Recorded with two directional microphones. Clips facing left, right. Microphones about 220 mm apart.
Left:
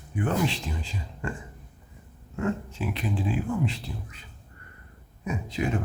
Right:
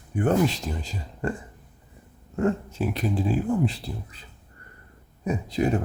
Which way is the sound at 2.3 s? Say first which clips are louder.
Right 5 dB; 40° right (ahead or behind).